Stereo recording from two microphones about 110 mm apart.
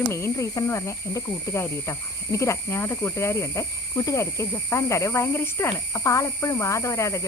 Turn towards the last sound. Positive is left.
turn(degrees=25)  # may be behind; listen again after turning